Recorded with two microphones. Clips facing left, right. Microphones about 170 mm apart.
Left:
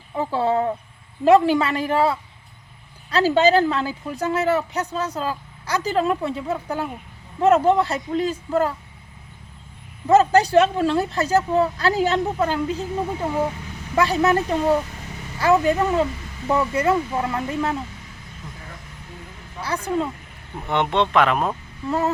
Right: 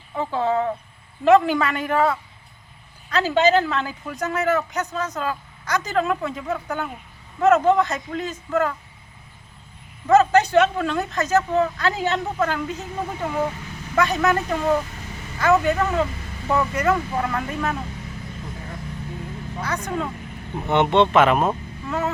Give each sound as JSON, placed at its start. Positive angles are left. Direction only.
{"t": 0.2, "sound": "speech", "side_deg": 35}
{"t": 10.1, "sound": "speech", "side_deg": 30}
{"t": 19.6, "sound": "speech", "side_deg": 30}
{"t": 20.7, "sound": "speech", "side_deg": 0}
{"t": 21.8, "sound": "speech", "side_deg": 35}